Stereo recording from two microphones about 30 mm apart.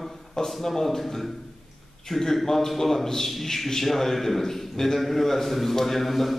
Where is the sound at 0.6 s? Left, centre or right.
Centre.